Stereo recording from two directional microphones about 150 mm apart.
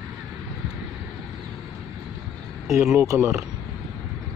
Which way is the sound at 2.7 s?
20° right (ahead or behind).